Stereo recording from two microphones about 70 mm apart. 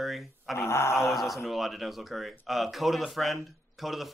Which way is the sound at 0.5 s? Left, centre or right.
Left.